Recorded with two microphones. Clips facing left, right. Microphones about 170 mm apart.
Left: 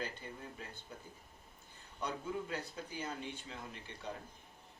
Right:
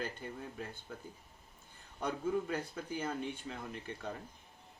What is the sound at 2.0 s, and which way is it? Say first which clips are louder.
Speech: right 5 dB; 50° right (ahead or behind).